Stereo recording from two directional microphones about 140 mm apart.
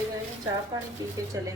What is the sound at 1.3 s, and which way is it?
Speech, 20° right (ahead or behind).